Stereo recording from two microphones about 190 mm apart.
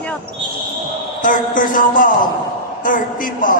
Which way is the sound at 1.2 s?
45° left (ahead or behind).